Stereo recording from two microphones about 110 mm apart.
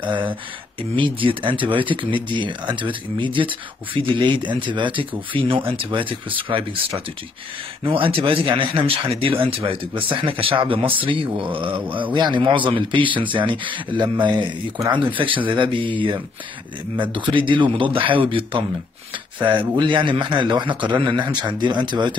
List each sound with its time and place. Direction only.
0.0 s speech: 50° right (ahead or behind)
16.9 s speech: 45° right (ahead or behind)
19.7 s speech: 45° right (ahead or behind)